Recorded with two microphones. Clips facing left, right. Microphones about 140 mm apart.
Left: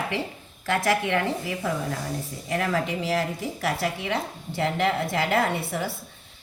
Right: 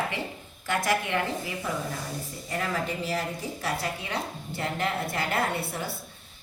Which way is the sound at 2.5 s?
90° left.